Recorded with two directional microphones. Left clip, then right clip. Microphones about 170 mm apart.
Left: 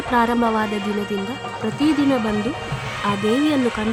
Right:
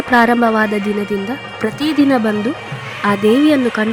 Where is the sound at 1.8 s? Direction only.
25° right (ahead or behind).